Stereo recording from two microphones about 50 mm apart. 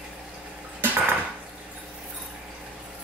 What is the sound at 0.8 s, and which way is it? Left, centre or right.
Dishes, right.